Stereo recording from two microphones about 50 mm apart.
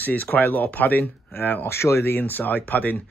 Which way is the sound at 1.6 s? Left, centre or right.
Left.